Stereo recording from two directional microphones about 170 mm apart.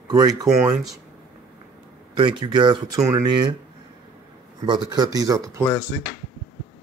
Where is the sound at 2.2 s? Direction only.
25° right (ahead or behind).